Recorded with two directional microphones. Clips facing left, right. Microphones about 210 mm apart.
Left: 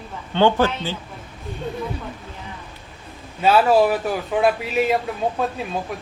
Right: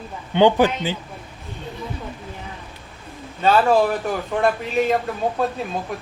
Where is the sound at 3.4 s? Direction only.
5° left (ahead or behind).